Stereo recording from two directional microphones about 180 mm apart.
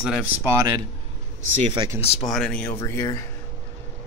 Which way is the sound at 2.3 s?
5° left (ahead or behind).